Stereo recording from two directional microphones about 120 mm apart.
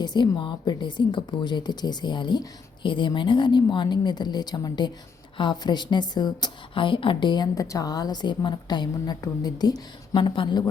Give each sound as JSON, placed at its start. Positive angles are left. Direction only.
{"t": 0.0, "sound": "a woman's voice", "side_deg": 40}